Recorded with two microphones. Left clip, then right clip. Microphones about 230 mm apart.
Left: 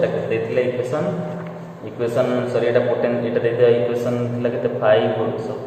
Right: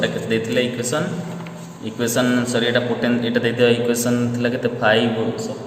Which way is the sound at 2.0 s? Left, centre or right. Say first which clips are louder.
Even; right.